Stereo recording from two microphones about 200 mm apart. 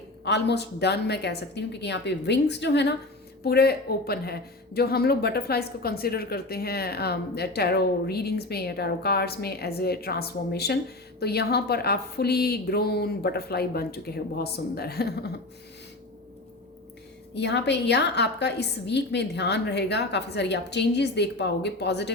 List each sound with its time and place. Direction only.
0.3 s a woman's voice: 60° left (ahead or behind)
17.3 s a woman's voice: 60° left (ahead or behind)